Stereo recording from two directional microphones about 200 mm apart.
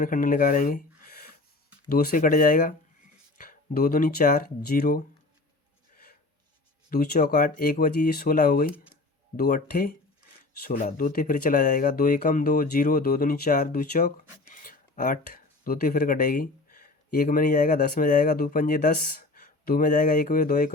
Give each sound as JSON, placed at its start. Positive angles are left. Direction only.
{"t": 0.0, "sound": "speech", "side_deg": 40}
{"t": 6.9, "sound": "speech", "side_deg": 45}